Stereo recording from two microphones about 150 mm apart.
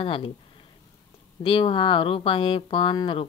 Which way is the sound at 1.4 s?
35° left (ahead or behind).